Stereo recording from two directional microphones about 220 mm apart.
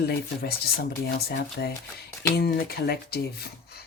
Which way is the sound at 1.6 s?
50° left (ahead or behind).